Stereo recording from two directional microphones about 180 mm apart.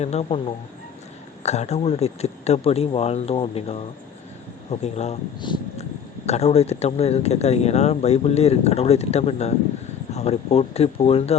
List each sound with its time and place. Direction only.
0.0 s speech: 35° left (ahead or behind)
1.5 s speech: 35° left (ahead or behind)
5.5 s a sound: 25° left (ahead or behind)
6.2 s speech: 35° left (ahead or behind)